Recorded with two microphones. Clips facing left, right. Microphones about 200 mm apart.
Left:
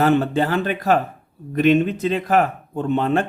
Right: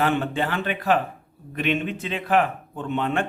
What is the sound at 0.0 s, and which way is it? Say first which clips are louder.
Speech: left 6 dB; 40° left (ahead or behind).